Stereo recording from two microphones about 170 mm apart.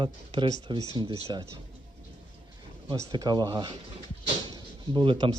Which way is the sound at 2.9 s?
25° right (ahead or behind).